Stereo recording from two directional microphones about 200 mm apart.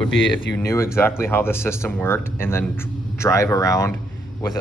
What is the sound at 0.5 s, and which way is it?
Speech, 15° left (ahead or behind).